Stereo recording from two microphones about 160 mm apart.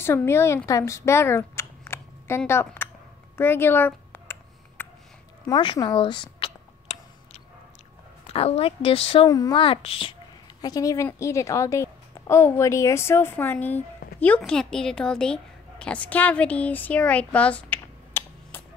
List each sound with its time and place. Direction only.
0.0 s speech: 15° left (ahead or behind)
3.3 s a sound: 15° left (ahead or behind)
5.5 s a sound: 25° left (ahead or behind)
8.3 s a woman's voice: 40° left (ahead or behind)
9.3 s a woman's voice: 25° left (ahead or behind)
10.6 s a woman's voice: 20° left (ahead or behind)